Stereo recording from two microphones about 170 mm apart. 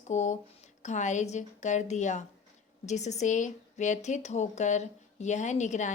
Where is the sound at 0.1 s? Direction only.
45° left (ahead or behind).